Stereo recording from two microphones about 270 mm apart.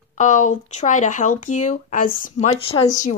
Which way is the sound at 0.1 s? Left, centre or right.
Left.